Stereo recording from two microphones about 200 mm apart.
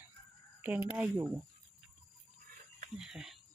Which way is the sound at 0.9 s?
10° right (ahead or behind).